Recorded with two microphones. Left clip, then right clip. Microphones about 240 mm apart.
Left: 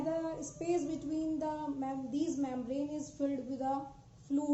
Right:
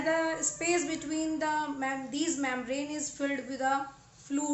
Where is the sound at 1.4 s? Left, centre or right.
Centre.